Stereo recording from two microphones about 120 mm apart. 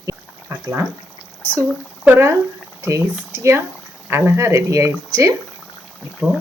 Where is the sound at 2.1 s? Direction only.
20° right (ahead or behind).